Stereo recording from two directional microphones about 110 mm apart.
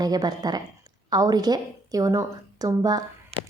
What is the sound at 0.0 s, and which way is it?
A woman's voice, 35° right (ahead or behind).